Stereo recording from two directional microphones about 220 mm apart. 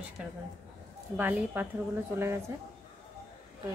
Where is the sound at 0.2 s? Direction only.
5° right (ahead or behind).